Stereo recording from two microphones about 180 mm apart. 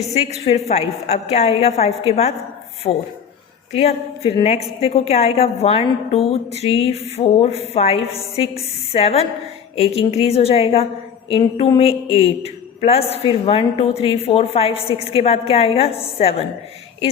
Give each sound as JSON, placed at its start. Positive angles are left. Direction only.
{"t": 0.0, "sound": "a woman's voice", "side_deg": 35}